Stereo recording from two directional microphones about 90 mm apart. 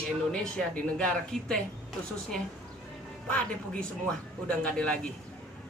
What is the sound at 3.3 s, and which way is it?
Speech, 15° left (ahead or behind).